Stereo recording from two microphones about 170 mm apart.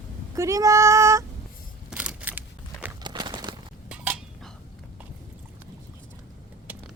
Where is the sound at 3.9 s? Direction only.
5° right (ahead or behind).